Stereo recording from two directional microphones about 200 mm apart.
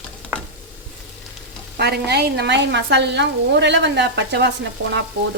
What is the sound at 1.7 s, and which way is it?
Speech, 55° right (ahead or behind).